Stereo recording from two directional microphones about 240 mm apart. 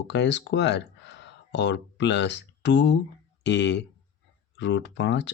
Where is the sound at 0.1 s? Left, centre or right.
Left.